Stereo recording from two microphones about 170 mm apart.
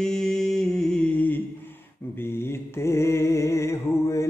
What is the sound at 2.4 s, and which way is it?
Mantra, 15° left (ahead or behind).